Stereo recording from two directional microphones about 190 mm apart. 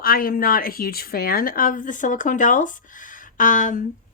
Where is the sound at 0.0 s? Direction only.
50° left (ahead or behind).